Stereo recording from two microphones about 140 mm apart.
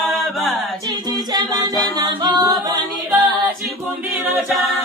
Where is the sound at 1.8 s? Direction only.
30° right (ahead or behind).